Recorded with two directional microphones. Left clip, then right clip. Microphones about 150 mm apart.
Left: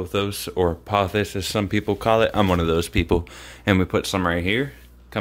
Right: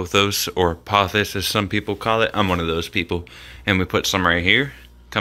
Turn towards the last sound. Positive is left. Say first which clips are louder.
# right 4 dB
turn(degrees=0)  # may be behind; listen again after turning